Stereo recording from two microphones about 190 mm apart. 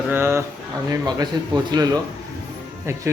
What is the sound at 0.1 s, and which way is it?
Speech, 10° right (ahead or behind).